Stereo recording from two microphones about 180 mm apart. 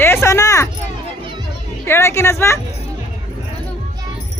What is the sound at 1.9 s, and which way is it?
Speech, 15° left (ahead or behind).